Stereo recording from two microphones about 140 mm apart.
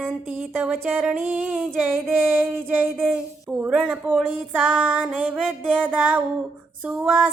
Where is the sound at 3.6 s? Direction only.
10° right (ahead or behind).